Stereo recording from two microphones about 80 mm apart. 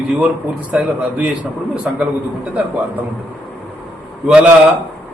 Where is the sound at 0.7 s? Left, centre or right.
Centre.